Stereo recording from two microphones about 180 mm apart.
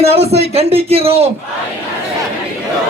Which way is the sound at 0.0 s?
35° right (ahead or behind).